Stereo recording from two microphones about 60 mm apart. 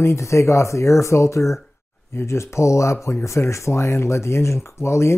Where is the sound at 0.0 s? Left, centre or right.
Left.